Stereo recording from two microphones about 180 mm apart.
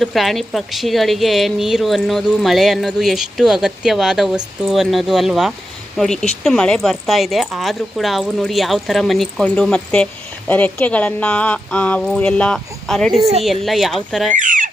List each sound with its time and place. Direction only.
0.0 s a woman's voice: centre (ahead or behind)
14.3 s speech: 45° right (ahead or behind)